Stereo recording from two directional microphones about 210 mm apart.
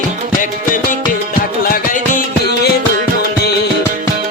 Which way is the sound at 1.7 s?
40° left (ahead or behind).